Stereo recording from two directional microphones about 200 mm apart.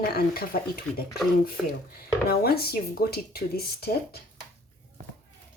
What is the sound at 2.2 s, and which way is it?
Speech, 50° left (ahead or behind).